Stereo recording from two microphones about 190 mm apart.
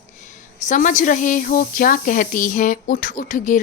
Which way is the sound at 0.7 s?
40° left (ahead or behind).